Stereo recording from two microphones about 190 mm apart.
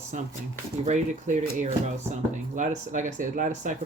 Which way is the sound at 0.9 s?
40° right (ahead or behind).